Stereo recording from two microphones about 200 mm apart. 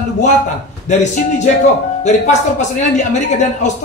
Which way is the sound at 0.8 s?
35° left (ahead or behind).